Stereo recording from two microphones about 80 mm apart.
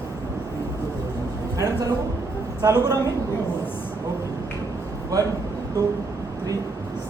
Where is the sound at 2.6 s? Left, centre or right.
Right.